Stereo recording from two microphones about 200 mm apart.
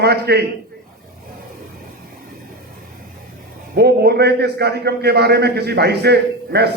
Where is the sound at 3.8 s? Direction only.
55° right (ahead or behind).